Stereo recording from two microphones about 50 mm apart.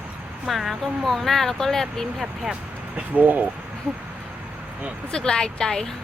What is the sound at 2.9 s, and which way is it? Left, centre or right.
Speech, right.